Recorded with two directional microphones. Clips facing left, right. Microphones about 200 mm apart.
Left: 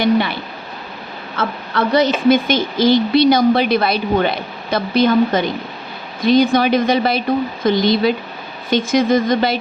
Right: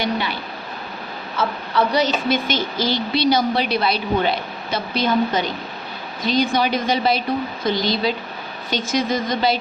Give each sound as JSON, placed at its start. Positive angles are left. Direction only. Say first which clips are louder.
{"t": 0.0, "sound": "a woman's voice", "louder": "left 8 dB", "side_deg": 55}
{"t": 1.4, "sound": "a woman's voice", "louder": "left 1 dB", "side_deg": 55}